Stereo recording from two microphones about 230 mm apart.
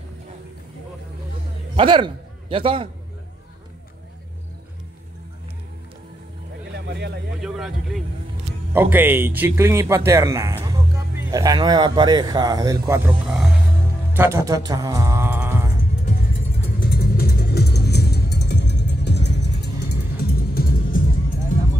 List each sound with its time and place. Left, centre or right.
1.8 s a man's voice: right
6.7 s a sound: right
7.4 s a sound: centre
8.7 s speech: centre
14.1 s music: centre
16.8 s music: left